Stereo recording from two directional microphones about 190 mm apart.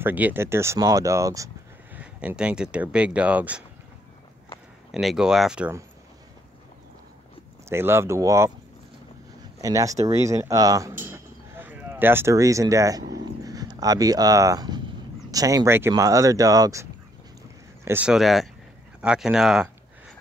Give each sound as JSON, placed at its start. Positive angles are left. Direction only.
{"t": 0.0, "sound": "speech", "side_deg": -10}
{"t": 2.0, "sound": "speech", "side_deg": -5}
{"t": 4.9, "sound": "speech", "side_deg": -5}
{"t": 7.7, "sound": "speech", "side_deg": -15}
{"t": 9.6, "sound": "speech", "side_deg": -15}
{"t": 17.8, "sound": "speech", "side_deg": -5}